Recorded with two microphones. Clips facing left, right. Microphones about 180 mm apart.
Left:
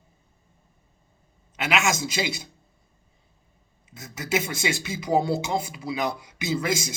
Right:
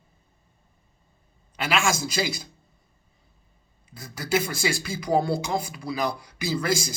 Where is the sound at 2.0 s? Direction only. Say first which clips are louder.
Right 1 dB; 25° left (ahead or behind).